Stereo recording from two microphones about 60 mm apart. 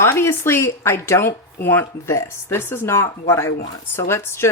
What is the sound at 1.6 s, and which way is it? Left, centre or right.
A woman's voice, left.